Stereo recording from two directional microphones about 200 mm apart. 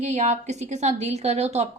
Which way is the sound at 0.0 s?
35° right (ahead or behind).